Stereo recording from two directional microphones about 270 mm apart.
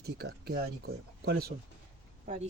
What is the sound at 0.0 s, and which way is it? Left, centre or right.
Speech, right.